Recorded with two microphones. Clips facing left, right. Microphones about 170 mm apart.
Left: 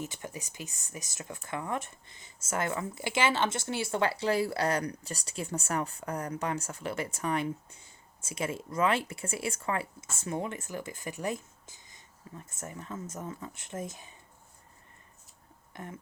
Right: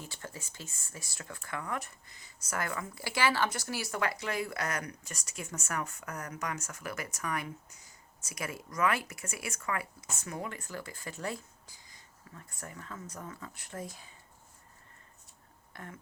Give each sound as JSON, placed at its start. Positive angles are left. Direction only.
{"t": 0.0, "sound": "speech", "side_deg": 20}
{"t": 15.7, "sound": "speech", "side_deg": 20}